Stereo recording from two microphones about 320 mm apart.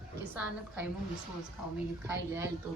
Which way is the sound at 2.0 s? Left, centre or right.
Centre.